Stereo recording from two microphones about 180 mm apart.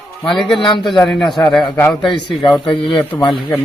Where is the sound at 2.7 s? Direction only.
30° left (ahead or behind).